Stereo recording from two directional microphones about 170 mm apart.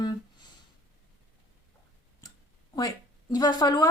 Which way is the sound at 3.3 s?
25° left (ahead or behind).